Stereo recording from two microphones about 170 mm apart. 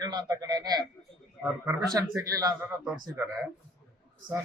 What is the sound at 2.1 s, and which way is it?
Speech, 20° right (ahead or behind).